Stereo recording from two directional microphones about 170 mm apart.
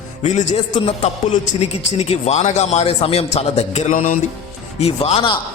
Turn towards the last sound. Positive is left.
turn(degrees=30)  # may be behind; listen again after turning